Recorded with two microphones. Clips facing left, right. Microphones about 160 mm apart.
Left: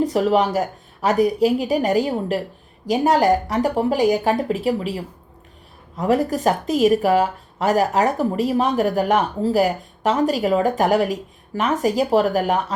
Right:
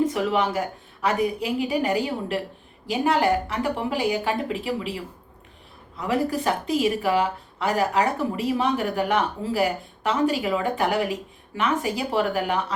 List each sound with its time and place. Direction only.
0.0 s speech: 35° left (ahead or behind)